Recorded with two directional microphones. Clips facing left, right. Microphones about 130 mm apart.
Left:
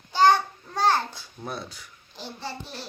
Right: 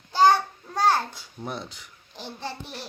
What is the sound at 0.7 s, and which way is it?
Babbling, 10° right (ahead or behind).